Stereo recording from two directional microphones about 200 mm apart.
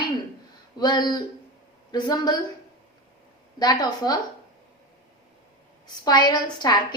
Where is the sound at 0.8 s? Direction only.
20° left (ahead or behind).